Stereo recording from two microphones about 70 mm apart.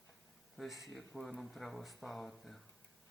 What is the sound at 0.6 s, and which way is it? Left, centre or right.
Speech, centre.